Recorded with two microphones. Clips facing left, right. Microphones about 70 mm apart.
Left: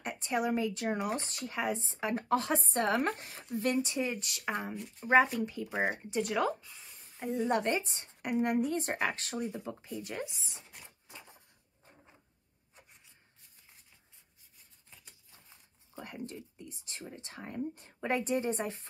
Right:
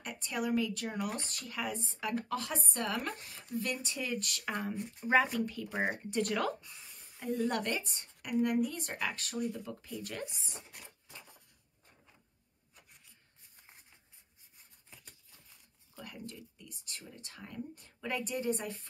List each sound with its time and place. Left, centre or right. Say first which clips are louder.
0.0 s speech: left 4 dB; left
4.2 s speech: left 1 dB; centre
6.6 s a sound: even; centre
7.4 s speech: left 7 dB; left
9.7 s speech: left 3 dB; left
10.6 s a sound: right 1 dB; centre
14.9 s patter: right 1 dB; centre
15.3 s speech: left 2 dB; left